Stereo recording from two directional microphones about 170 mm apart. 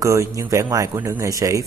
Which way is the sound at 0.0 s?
20° right (ahead or behind).